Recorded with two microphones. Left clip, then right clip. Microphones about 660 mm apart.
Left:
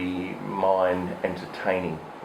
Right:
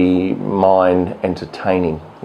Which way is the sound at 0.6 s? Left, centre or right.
Right.